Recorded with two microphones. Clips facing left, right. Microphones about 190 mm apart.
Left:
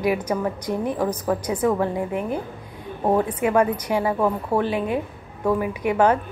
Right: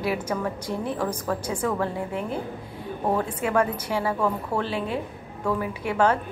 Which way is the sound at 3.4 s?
10° left (ahead or behind).